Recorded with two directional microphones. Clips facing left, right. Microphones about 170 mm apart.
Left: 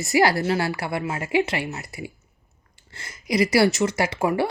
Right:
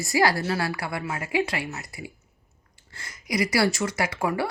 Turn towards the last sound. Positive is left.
turn(degrees=25)  # may be behind; listen again after turning